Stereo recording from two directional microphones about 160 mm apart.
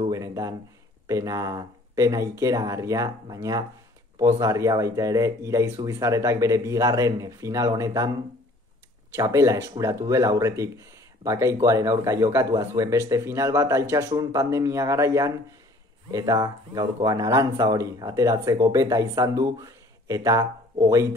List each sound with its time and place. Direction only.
0.1 s speech: 20° right (ahead or behind)